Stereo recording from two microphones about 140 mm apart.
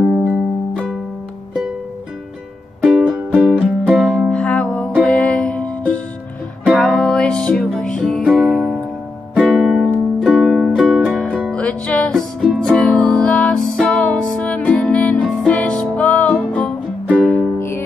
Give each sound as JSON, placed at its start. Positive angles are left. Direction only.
{"t": 0.3, "sound": "music", "side_deg": 5}
{"t": 2.8, "sound": "music", "side_deg": -5}